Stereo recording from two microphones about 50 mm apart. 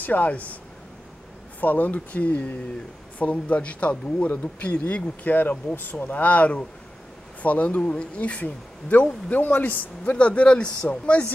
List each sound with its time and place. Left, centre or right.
0.0 s speech: left
1.6 s speech: left
5.3 s speech: left
10.1 s speech: left